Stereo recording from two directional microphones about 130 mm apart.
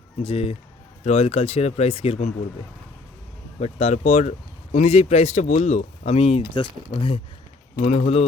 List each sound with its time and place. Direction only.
0.2 s speech: 50° left (ahead or behind)
3.6 s speech: 55° left (ahead or behind); by 7.2 s 40° left (ahead or behind)
7.8 s speech: 55° left (ahead or behind)